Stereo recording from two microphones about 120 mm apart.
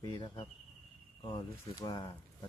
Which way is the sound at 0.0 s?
35° left (ahead or behind).